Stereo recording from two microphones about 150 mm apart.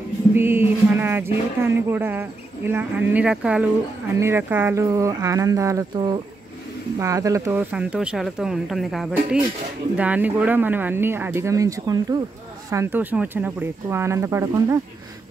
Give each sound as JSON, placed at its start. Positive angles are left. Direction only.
{"t": 0.3, "sound": "music", "side_deg": -15}
{"t": 4.2, "sound": "speech", "side_deg": -15}
{"t": 7.7, "sound": "speech", "side_deg": -5}